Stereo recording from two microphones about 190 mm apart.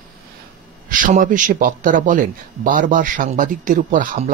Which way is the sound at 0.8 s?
45° right (ahead or behind).